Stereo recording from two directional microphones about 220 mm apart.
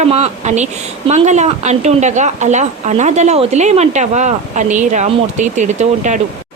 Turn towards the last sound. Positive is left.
turn(degrees=-30)  # may be behind; listen again after turning